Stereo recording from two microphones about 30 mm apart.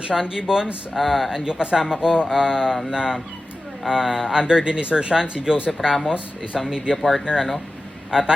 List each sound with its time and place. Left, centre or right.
0.1 s speech: right
0.9 s speech: centre
1.6 s speech: right
3.8 s speech: centre
5.8 s speech: centre
6.1 s speech: right
6.9 s speech: centre
7.3 s speech: centre